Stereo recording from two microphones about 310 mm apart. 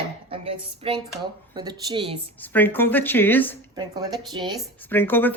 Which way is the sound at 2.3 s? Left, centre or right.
Centre.